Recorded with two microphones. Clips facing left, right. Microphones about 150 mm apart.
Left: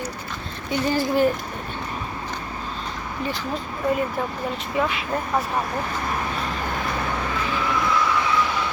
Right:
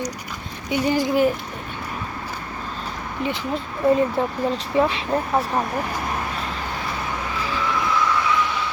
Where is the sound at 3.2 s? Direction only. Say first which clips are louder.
Right 3 dB; 20° right (ahead or behind).